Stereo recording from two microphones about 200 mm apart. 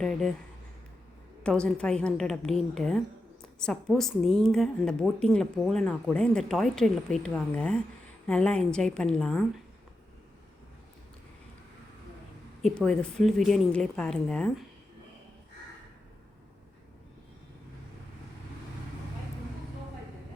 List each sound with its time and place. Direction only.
0.0 s a woman's voice: 5° left (ahead or behind)
1.5 s a woman's voice: 5° left (ahead or behind)
12.6 s a woman's voice: 5° left (ahead or behind)